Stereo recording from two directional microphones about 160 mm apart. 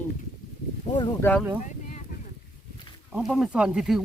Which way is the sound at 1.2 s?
15° left (ahead or behind).